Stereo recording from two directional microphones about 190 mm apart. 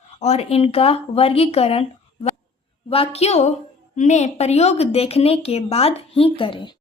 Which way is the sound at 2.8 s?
30° left (ahead or behind).